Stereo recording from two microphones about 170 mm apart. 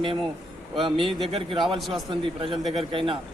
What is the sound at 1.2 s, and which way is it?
Speech, 30° right (ahead or behind).